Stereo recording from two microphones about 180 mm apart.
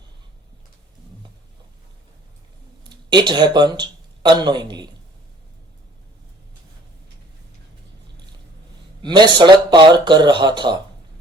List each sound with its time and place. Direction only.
2.9 s speech: 25° right (ahead or behind)
9.0 s speech: 25° right (ahead or behind)